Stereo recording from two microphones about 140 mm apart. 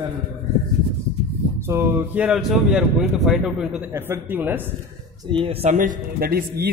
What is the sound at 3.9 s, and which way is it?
Speech, 15° right (ahead or behind).